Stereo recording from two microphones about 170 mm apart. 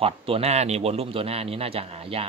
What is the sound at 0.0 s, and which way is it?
Speech, 35° right (ahead or behind).